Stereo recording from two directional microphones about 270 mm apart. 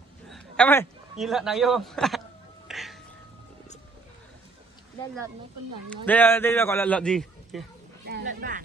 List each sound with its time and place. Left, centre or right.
0.3 s a man's voice: centre
2.7 s music: centre
5.9 s a man's voice: centre
8.1 s speech: right